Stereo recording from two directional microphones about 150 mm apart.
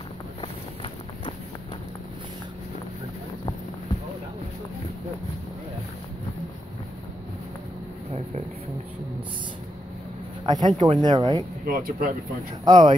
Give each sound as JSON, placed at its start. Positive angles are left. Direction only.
{"t": 0.4, "sound": "run", "side_deg": 35}
{"t": 10.4, "sound": "speech", "side_deg": -30}
{"t": 11.6, "sound": "speech", "side_deg": -75}
{"t": 12.6, "sound": "speech", "side_deg": -30}